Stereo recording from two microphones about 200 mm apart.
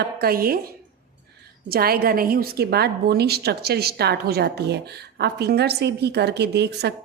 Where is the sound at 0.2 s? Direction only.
50° right (ahead or behind).